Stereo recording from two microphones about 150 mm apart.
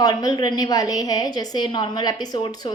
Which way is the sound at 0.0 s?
25° left (ahead or behind).